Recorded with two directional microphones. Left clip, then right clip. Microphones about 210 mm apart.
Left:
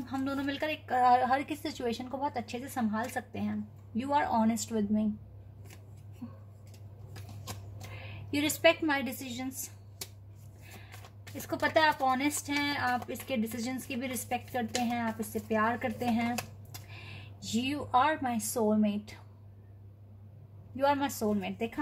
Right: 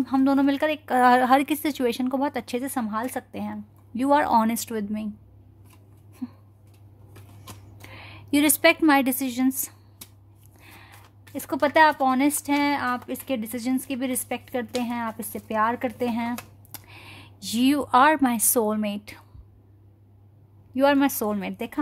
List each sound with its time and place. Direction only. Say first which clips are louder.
0.0 s speech: right 13 dB; 55° right (ahead or behind)
8.3 s speech: right 7 dB; 55° right (ahead or behind)
11.4 s speech: right 8 dB; 50° right (ahead or behind)
20.9 s speech: right 7 dB; 45° right (ahead or behind)